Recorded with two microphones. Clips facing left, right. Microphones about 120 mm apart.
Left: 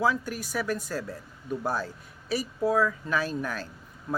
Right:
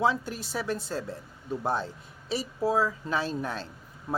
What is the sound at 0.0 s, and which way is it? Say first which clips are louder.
Speech: even; 25° right (ahead or behind).